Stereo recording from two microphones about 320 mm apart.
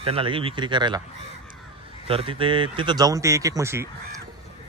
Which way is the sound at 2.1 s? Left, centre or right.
Centre.